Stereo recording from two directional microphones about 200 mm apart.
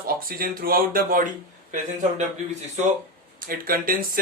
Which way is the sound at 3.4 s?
45° right (ahead or behind).